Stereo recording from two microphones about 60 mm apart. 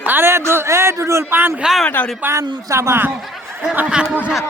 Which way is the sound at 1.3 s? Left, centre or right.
Right.